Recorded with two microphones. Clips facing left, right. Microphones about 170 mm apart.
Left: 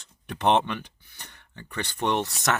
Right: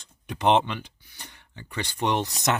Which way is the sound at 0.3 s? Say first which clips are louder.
Right 1 dB; 15° right (ahead or behind).